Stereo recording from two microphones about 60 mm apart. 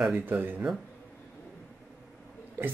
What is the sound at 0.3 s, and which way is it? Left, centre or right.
Speech, right.